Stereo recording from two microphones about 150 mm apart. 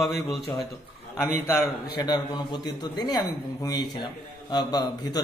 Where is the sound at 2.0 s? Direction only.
30° left (ahead or behind).